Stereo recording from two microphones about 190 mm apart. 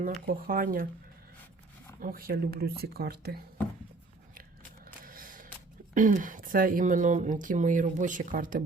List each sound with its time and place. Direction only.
0.3 s speech: 50° right (ahead or behind)
2.0 s speech: 50° right (ahead or behind)
5.0 s a sound: 50° right (ahead or behind)
5.9 s speech: 45° right (ahead or behind)